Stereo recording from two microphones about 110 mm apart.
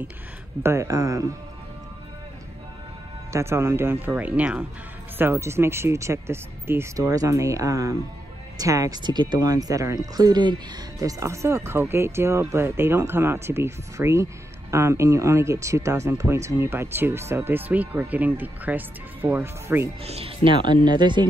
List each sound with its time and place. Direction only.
0.6 s speech: 25° right (ahead or behind)
3.3 s speech: 25° right (ahead or behind)
20.1 s speech: 65° right (ahead or behind); by 21.3 s 40° right (ahead or behind)